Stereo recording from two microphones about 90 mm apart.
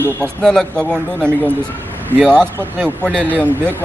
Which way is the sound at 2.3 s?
10° left (ahead or behind).